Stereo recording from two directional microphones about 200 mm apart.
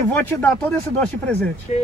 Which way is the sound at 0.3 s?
10° left (ahead or behind).